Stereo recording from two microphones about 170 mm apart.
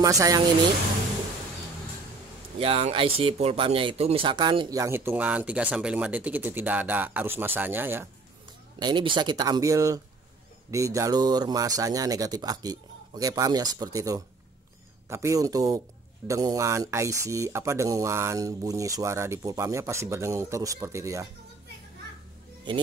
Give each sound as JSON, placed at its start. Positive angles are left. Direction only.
{"t": 0.0, "sound": "speech", "side_deg": -20}
{"t": 2.6, "sound": "speech", "side_deg": -35}
{"t": 8.7, "sound": "speech", "side_deg": -25}